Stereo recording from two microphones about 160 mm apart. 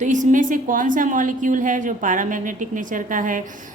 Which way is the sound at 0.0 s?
50° right (ahead or behind).